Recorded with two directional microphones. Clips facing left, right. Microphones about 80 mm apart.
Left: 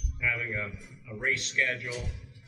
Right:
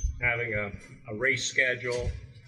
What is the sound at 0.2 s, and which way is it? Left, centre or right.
Speech, right.